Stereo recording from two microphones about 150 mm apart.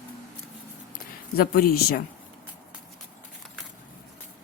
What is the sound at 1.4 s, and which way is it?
Speech, 85° left.